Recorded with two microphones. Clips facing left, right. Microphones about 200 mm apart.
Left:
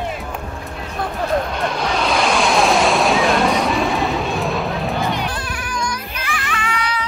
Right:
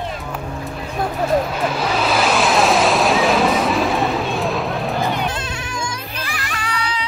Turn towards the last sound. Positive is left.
turn(degrees=-40)  # may be behind; listen again after turning